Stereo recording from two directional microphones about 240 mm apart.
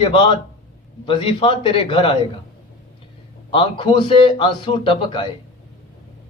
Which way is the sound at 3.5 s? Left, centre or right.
Centre.